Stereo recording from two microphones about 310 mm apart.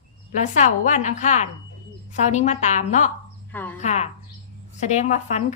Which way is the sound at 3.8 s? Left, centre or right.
Left.